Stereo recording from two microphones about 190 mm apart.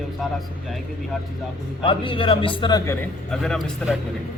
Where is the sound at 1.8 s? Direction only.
25° left (ahead or behind).